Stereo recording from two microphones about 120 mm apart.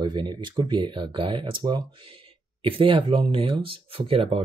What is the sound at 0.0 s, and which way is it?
Speech, 35° right (ahead or behind).